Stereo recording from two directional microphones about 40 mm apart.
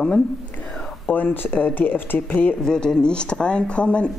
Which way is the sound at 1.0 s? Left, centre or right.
Left.